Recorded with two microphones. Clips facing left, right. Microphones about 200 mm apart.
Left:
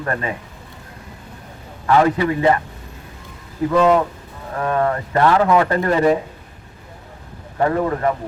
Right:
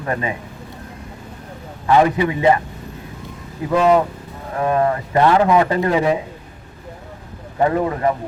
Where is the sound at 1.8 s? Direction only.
20° right (ahead or behind).